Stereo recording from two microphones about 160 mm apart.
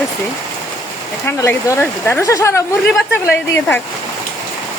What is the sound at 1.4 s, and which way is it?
Speech, 20° left (ahead or behind).